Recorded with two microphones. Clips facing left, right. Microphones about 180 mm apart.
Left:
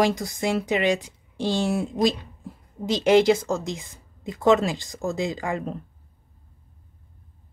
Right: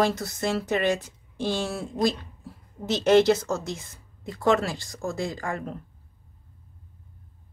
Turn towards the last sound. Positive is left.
turn(degrees=20)  # may be behind; listen again after turning